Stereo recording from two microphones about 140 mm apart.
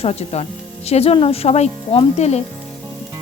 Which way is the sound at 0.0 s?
50° left (ahead or behind).